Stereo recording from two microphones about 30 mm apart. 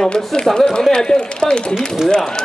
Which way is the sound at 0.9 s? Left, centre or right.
Left.